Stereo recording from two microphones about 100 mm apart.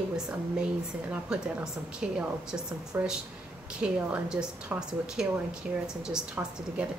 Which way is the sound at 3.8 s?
10° right (ahead or behind).